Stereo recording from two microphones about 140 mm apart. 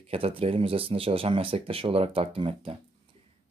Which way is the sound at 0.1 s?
40° right (ahead or behind).